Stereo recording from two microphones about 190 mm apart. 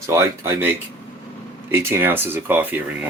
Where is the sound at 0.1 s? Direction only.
15° right (ahead or behind).